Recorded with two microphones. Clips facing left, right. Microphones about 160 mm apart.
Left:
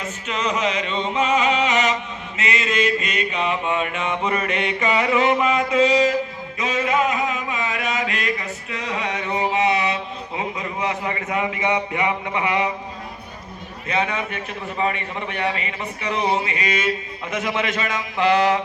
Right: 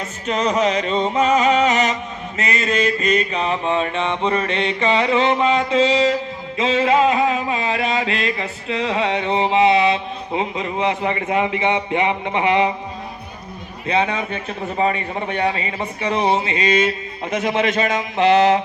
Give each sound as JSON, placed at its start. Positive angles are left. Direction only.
{"t": 0.3, "sound": "a sound", "side_deg": -40}
{"t": 2.4, "sound": "mantra", "side_deg": -40}
{"t": 6.6, "sound": "a sound", "side_deg": -30}
{"t": 8.9, "sound": "mantra", "side_deg": -30}
{"t": 13.8, "sound": "a man's voice", "side_deg": -30}
{"t": 17.3, "sound": "mantra", "side_deg": -25}